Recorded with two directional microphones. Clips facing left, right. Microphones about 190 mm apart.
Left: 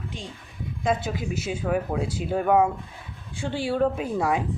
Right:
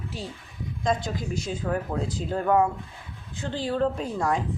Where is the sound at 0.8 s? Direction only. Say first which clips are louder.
Left 1 dB; 5° left (ahead or behind).